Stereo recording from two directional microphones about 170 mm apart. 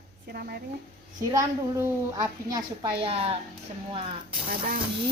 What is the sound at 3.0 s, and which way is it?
Speech, 35° right (ahead or behind).